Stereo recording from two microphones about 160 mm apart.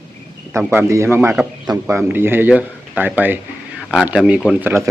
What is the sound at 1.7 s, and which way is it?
Speech, 25° right (ahead or behind).